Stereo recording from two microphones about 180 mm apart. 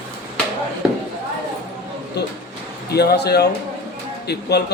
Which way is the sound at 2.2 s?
70° left (ahead or behind).